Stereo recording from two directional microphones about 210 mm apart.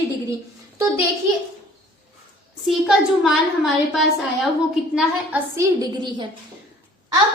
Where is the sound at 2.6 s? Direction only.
Centre (ahead or behind); by 6.3 s 20° right (ahead or behind).